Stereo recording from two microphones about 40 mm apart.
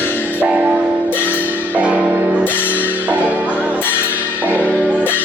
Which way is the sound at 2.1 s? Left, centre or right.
Right.